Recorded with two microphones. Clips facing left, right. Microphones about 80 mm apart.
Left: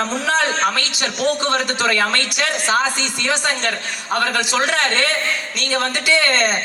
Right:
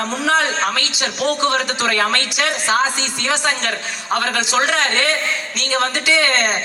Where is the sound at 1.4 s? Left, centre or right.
Right.